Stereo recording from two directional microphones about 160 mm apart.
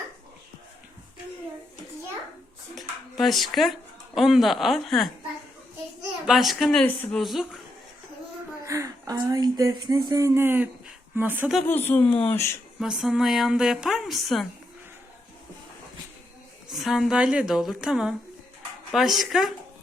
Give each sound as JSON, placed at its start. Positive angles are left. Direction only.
{"t": 2.7, "sound": "speech", "side_deg": 0}
{"t": 6.2, "sound": "a woman's voice", "side_deg": 0}
{"t": 8.6, "sound": "speech", "side_deg": -20}
{"t": 11.6, "sound": "speech", "side_deg": 10}
{"t": 12.8, "sound": "a woman's voice", "side_deg": 0}
{"t": 16.6, "sound": "a woman's voice", "side_deg": 0}